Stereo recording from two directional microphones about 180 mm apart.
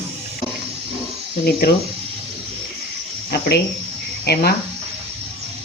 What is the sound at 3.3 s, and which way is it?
Speech, 65° left (ahead or behind).